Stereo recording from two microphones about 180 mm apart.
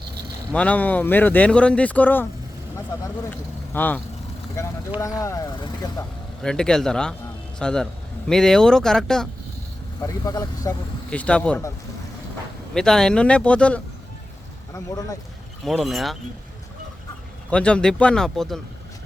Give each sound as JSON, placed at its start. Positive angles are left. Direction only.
{"t": 0.5, "sound": "speech", "side_deg": 5}
{"t": 3.2, "sound": "speech", "side_deg": 10}
{"t": 6.4, "sound": "speech", "side_deg": 5}
{"t": 10.0, "sound": "speech", "side_deg": 20}
{"t": 11.1, "sound": "speech", "side_deg": 5}
{"t": 12.7, "sound": "speech", "side_deg": 5}
{"t": 14.7, "sound": "speech", "side_deg": 15}
{"t": 15.6, "sound": "speech", "side_deg": 0}
{"t": 17.5, "sound": "speech", "side_deg": 5}